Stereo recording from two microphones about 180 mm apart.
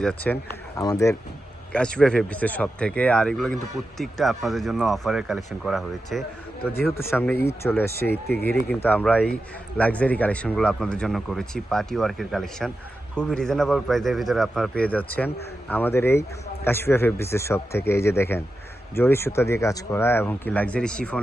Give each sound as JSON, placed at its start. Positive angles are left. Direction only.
{"t": 0.0, "sound": "speech", "side_deg": 5}
{"t": 0.8, "sound": "speech", "side_deg": 20}
{"t": 1.7, "sound": "speech", "side_deg": 5}
{"t": 6.9, "sound": "speech", "side_deg": 10}